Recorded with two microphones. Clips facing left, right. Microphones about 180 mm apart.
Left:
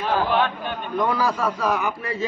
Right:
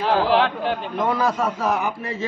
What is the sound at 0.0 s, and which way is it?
Speech, 90° right.